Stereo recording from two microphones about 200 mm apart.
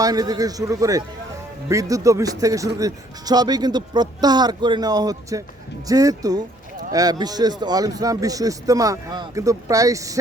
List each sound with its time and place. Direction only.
0.0 s speech: 20° right (ahead or behind)